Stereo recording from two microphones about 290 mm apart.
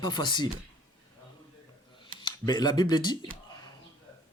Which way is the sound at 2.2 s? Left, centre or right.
Centre.